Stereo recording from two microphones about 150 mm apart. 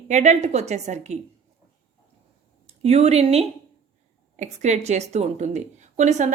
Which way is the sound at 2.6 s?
45° right (ahead or behind).